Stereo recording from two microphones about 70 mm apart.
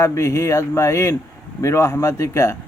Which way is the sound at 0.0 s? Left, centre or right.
Left.